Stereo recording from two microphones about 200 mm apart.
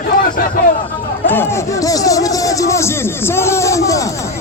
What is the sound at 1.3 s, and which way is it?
Music, 10° left (ahead or behind).